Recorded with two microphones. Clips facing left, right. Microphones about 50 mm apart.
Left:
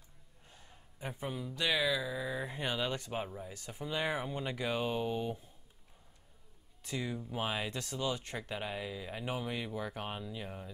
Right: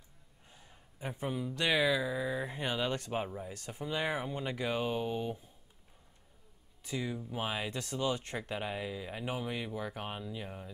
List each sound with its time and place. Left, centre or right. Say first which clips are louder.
0.5 s a sound: even; centre
1.6 s speech: right 2 dB; centre
7.0 s speech: even; centre
7.7 s speech: right 2 dB; centre
8.4 s speech: right 2 dB; centre